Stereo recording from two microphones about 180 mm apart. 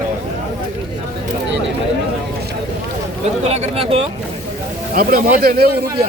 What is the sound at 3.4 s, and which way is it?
Speech, 35° right (ahead or behind).